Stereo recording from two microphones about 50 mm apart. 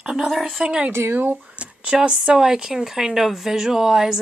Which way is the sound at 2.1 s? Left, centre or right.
Centre.